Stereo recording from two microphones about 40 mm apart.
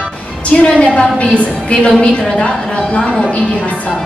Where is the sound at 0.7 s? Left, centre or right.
Left.